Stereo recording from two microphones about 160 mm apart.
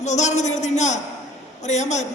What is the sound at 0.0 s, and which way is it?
A man's voice, 45° left (ahead or behind).